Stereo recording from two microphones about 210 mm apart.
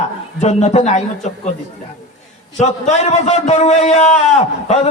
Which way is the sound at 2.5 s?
30° left (ahead or behind).